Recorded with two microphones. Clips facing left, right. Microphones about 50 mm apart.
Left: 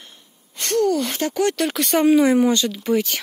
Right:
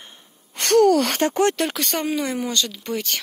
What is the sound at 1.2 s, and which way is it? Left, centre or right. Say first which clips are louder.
Speech: even; right.